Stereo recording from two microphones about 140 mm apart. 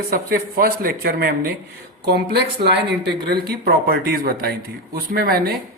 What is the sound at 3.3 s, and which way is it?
Speech, 90° right.